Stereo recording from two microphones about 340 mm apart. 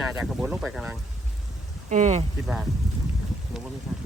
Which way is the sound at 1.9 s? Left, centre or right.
Right.